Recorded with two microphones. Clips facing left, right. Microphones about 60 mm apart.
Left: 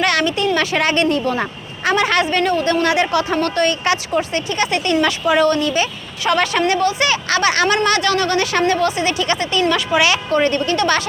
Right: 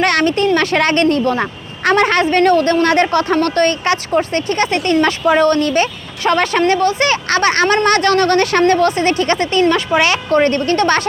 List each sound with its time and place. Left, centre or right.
0.0 s speech: right